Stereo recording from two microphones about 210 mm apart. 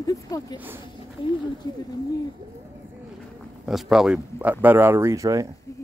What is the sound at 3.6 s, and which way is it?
Speech, centre (ahead or behind).